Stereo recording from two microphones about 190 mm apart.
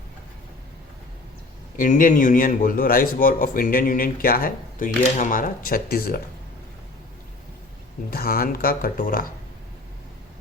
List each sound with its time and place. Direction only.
1.7 s speech: 45° left (ahead or behind)
8.1 s speech: 50° left (ahead or behind)